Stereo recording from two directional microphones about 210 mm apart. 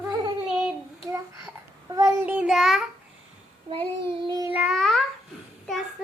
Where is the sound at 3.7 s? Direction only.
25° right (ahead or behind).